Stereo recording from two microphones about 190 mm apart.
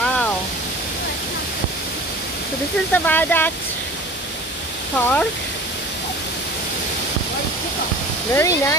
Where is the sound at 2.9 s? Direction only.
10° left (ahead or behind).